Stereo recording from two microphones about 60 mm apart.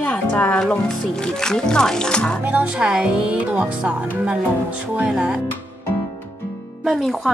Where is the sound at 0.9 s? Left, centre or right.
Centre.